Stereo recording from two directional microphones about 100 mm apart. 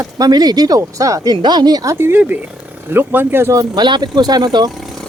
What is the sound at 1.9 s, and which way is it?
Speech, 20° right (ahead or behind).